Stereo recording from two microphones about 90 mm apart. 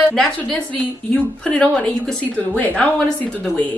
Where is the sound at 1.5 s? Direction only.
15° left (ahead or behind).